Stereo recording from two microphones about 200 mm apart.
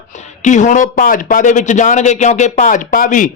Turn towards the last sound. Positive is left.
turn(degrees=40)  # may be behind; listen again after turning